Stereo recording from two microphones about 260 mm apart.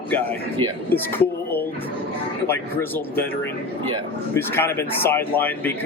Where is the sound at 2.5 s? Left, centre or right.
Centre.